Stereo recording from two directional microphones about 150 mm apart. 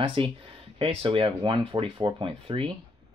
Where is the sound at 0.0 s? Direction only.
35° right (ahead or behind).